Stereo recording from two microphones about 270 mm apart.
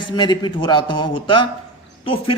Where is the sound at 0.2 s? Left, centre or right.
Centre.